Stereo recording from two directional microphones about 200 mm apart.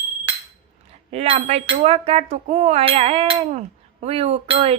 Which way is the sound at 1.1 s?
30° right (ahead or behind).